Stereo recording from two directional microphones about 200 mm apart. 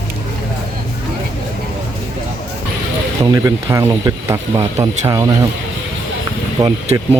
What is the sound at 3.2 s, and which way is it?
Speech, 20° right (ahead or behind).